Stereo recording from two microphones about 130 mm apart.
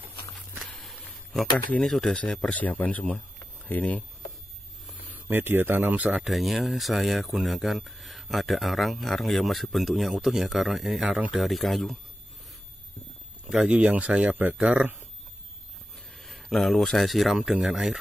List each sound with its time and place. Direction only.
0.0 s a sound: 40° left (ahead or behind)
0.7 s a sound: 5° left (ahead or behind)
1.7 s speech: 5° left (ahead or behind)
5.1 s speech: 15° right (ahead or behind)
6.2 s speech: centre (ahead or behind)
11.3 s speech: centre (ahead or behind)
13.5 s speech: 5° right (ahead or behind)
16.2 s speech: centre (ahead or behind)